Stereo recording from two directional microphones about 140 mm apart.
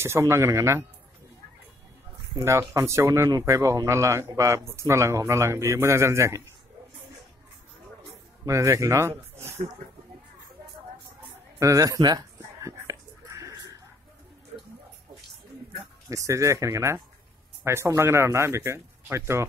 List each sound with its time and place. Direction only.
0.0 s speech: 20° right (ahead or behind)
2.3 s speech: 20° right (ahead or behind)
8.5 s speech: 20° right (ahead or behind)
9.4 s speech: 50° right (ahead or behind)
11.6 s a sound: 25° right (ahead or behind)
16.1 s speech: 20° right (ahead or behind)